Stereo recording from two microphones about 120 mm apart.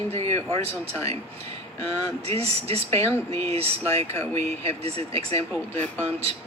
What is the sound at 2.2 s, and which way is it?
Speech, 60° right (ahead or behind).